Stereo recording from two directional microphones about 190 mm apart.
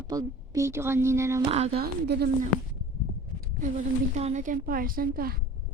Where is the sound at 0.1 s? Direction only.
20° right (ahead or behind).